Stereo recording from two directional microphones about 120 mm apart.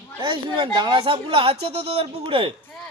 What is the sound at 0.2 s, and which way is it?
Speech, 45° right (ahead or behind).